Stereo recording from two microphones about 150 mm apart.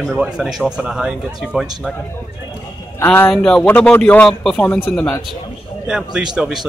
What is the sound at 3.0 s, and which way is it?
Speech, 15° left (ahead or behind).